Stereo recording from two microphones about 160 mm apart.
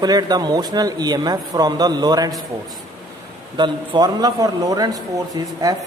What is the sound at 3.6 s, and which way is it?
Speech, 25° right (ahead or behind).